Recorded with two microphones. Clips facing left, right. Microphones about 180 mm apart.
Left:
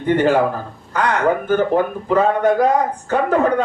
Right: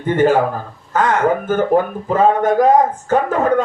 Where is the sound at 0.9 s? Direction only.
45° right (ahead or behind).